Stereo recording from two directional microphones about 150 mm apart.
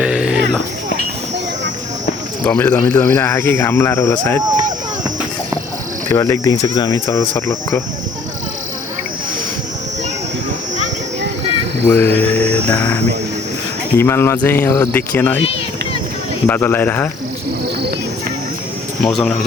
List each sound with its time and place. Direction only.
0.0 s a sound: 5° right (ahead or behind)
2.4 s speech: 10° left (ahead or behind)
6.1 s speech: 20° left (ahead or behind)
11.9 s speech: 15° left (ahead or behind)
16.5 s speech: 15° left (ahead or behind)
19.0 s speech: 5° left (ahead or behind)